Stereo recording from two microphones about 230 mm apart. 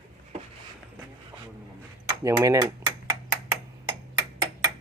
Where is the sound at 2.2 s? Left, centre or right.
Centre.